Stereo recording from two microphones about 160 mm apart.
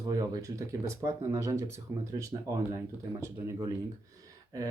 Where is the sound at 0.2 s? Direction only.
20° right (ahead or behind).